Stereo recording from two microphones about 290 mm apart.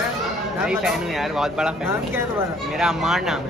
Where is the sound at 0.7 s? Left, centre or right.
Centre.